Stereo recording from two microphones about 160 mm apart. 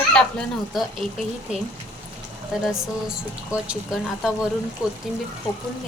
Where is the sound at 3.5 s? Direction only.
5° right (ahead or behind).